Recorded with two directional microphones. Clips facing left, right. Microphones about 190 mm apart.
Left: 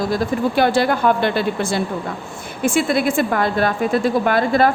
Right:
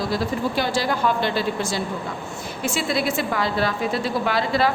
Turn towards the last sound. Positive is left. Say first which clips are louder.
# left 5 dB
turn(degrees=50)  # may be behind; listen again after turning